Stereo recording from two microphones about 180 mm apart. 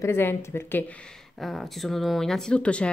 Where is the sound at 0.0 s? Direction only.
15° left (ahead or behind).